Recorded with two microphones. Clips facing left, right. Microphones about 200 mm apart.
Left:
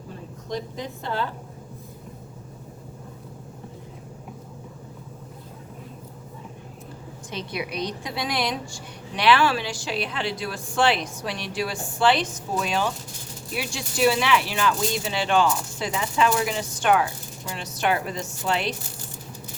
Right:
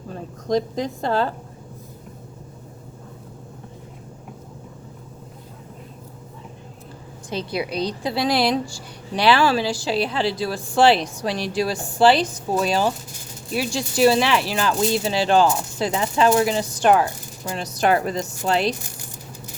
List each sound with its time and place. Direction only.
0.5 s speech: 40° right (ahead or behind)
7.3 s speech: 35° right (ahead or behind)